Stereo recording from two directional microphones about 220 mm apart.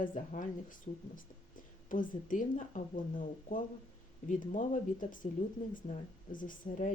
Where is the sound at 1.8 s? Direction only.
35° left (ahead or behind).